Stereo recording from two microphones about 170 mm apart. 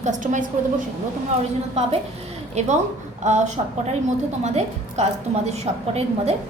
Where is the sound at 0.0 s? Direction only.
45° right (ahead or behind).